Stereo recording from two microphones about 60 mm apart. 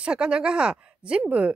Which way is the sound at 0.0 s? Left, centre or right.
Centre.